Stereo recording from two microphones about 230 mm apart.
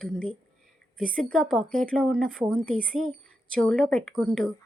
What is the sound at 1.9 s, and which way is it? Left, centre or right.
Speech, centre.